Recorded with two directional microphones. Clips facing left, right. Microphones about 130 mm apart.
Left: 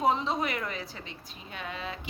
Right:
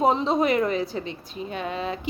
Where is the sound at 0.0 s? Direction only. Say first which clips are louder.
Right 6 dB; 25° right (ahead or behind).